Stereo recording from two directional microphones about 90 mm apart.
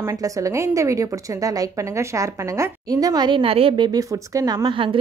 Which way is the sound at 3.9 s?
40° right (ahead or behind).